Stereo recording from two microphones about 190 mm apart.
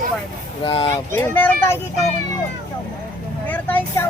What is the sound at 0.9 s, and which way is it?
Speech, 10° left (ahead or behind).